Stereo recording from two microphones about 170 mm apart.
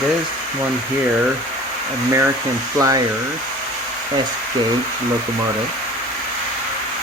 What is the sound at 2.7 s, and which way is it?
Speech, 20° right (ahead or behind).